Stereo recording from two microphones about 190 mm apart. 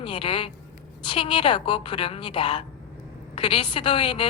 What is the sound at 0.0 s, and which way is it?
A woman's voice, 25° left (ahead or behind).